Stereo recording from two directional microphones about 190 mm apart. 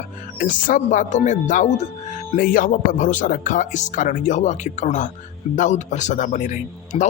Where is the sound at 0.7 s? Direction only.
40° left (ahead or behind).